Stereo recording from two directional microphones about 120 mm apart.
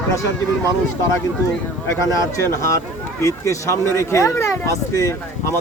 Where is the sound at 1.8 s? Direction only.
25° left (ahead or behind).